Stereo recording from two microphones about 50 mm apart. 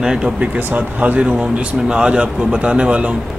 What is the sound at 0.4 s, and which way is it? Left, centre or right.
Speech, right.